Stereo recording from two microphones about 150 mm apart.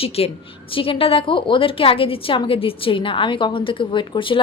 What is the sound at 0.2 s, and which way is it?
A woman's voice, 40° left (ahead or behind).